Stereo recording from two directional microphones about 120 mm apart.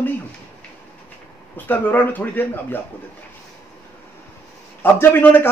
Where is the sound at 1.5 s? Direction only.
15° left (ahead or behind).